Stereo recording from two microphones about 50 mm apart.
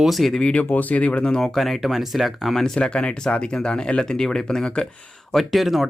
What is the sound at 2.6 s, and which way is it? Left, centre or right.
Speech, left.